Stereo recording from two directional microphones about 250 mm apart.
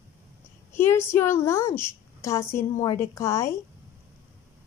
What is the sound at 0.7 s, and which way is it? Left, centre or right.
A child's voice, centre.